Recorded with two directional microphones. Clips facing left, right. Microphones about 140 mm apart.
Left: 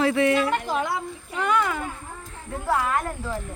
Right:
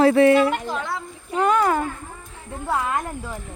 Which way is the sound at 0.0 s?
35° right (ahead or behind).